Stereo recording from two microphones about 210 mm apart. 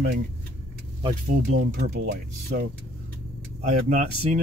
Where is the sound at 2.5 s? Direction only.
40° right (ahead or behind).